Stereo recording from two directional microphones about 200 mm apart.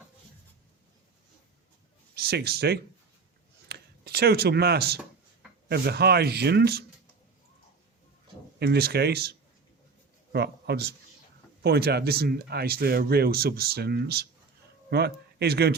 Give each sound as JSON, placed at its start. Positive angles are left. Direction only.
{"t": 2.1, "sound": "speech", "side_deg": -50}
{"t": 3.7, "sound": "a sound", "side_deg": -50}
{"t": 5.6, "sound": "speech", "side_deg": -55}
{"t": 8.5, "sound": "speech", "side_deg": -55}
{"t": 10.3, "sound": "a man's voice", "side_deg": -55}